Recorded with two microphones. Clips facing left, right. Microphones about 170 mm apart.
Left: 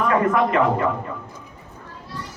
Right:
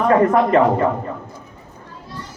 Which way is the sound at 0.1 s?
35° right (ahead or behind).